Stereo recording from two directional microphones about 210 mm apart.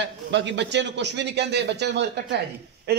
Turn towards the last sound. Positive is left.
turn(degrees=-50)  # may be behind; listen again after turning